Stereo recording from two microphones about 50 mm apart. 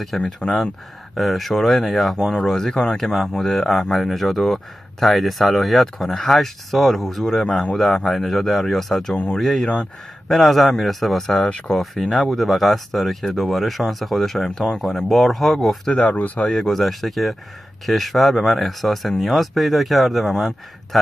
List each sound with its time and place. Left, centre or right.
0.1 s speech: centre
9.1 s speech: left
9.4 s speech: centre
11.4 s speech: left
11.7 s speech: centre
15.9 s speech: centre
16.2 s speech: left
16.4 s speech: centre